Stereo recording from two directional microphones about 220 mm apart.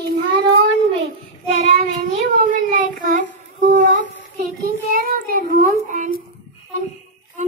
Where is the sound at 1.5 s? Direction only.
35° right (ahead or behind).